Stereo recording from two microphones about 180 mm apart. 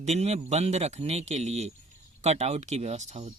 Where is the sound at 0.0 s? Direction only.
35° right (ahead or behind).